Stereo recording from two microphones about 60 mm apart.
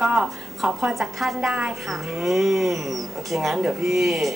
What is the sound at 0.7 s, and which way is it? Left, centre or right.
A woman's voice, centre.